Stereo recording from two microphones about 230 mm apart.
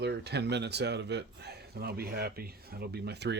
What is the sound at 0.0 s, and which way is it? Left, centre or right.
A man's voice, right.